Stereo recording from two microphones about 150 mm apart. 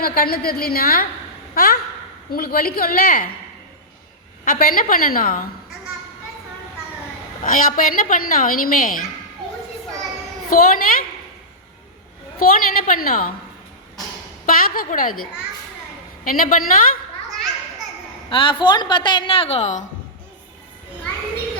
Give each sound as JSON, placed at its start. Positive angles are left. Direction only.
{"t": 0.0, "sound": "a woman's voice", "side_deg": 85}
{"t": 4.4, "sound": "a woman's voice", "side_deg": 75}
{"t": 7.4, "sound": "a woman's voice", "side_deg": 65}
{"t": 10.5, "sound": "a woman's voice", "side_deg": 75}
{"t": 12.4, "sound": "a woman's voice", "side_deg": 75}
{"t": 14.4, "sound": "a woman's voice", "side_deg": 70}
{"t": 16.2, "sound": "a woman's voice", "side_deg": 65}
{"t": 18.3, "sound": "a woman's voice", "side_deg": 35}